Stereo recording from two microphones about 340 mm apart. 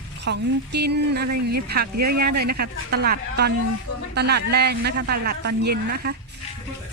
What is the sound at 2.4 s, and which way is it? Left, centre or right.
Speech, right.